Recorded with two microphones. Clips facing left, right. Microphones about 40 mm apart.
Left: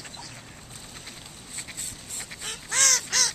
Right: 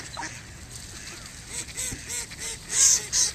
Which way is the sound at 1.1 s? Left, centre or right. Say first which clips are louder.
Right 1 dB; right.